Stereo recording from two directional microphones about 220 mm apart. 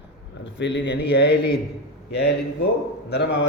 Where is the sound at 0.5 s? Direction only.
55° left (ahead or behind).